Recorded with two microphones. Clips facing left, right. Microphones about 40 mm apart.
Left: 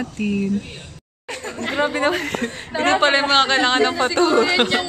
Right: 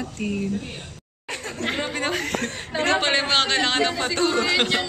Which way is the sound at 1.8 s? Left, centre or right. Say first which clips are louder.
Left 10 dB; centre.